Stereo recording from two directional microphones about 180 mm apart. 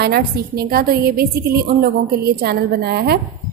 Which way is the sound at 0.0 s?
60° right (ahead or behind).